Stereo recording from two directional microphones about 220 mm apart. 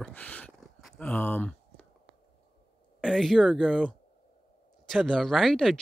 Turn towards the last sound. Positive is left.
turn(degrees=0)  # may be behind; listen again after turning